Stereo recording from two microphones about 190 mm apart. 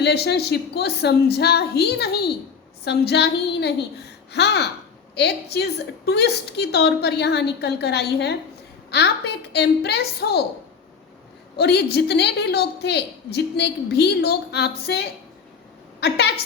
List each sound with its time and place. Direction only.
0.0 s a woman's voice: 60° left (ahead or behind)
11.5 s a woman's voice: 60° left (ahead or behind)